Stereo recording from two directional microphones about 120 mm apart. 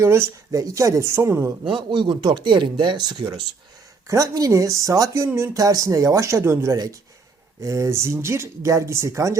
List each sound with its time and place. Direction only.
0.0 s speech: 20° right (ahead or behind)
1.7 s speech: 40° right (ahead or behind)
4.0 s speech: 30° right (ahead or behind)